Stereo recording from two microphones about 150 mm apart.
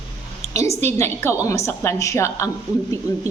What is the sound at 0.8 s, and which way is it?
A woman's voice, 15° left (ahead or behind).